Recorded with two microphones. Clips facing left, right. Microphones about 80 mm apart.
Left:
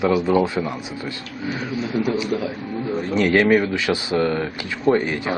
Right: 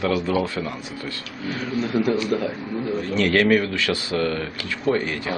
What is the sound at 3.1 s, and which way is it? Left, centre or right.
Speech, centre.